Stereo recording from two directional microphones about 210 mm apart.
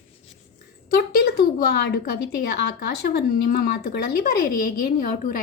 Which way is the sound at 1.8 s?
50° left (ahead or behind).